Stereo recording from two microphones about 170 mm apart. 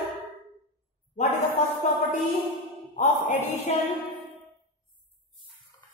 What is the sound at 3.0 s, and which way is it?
Speech, 40° left (ahead or behind).